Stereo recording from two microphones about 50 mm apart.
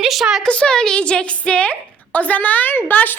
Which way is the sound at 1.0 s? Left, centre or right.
Left.